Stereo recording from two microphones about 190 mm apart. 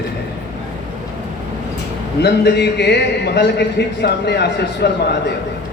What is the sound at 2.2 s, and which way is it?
A man's voice, 60° left (ahead or behind).